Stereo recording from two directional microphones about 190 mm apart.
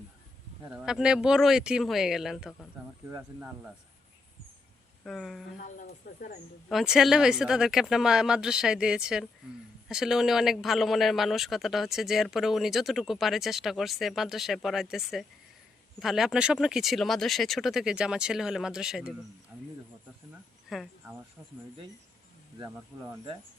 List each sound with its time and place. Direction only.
0.7 s a man's voice: 5° right (ahead or behind)
3.1 s speech: 10° right (ahead or behind)
5.0 s a man's voice: centre (ahead or behind)
5.5 s speech: 45° left (ahead or behind)
6.7 s a man's voice: centre (ahead or behind)
20.7 s speech: centre (ahead or behind)
22.5 s speech: 20° right (ahead or behind)